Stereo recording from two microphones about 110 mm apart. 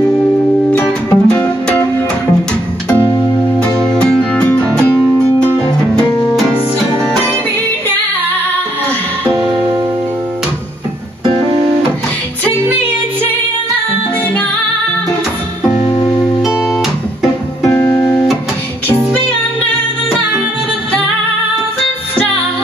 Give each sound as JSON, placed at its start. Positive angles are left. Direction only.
{"t": 0.7, "sound": "music", "side_deg": 10}
{"t": 3.5, "sound": "music", "side_deg": 5}
{"t": 17.6, "sound": "music", "side_deg": 20}